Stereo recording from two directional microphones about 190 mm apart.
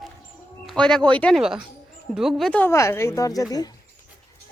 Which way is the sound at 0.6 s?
Centre (ahead or behind).